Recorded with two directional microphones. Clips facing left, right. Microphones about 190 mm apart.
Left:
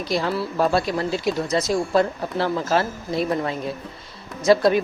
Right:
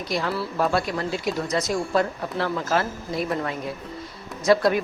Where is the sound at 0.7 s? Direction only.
30° left (ahead or behind).